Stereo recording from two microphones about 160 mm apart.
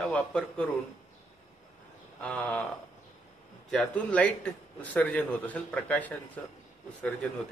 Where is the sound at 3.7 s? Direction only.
5° left (ahead or behind).